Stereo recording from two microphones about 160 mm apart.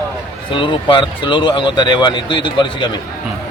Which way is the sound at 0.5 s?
30° left (ahead or behind).